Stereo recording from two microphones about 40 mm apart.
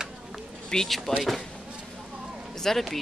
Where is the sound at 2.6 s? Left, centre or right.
Centre.